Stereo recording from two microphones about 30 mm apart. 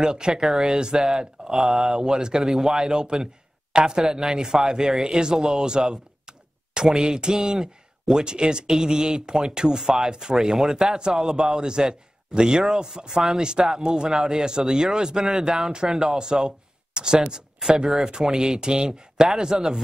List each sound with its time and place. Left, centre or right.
0.0 s a man's voice: right
10.3 s a man's voice: centre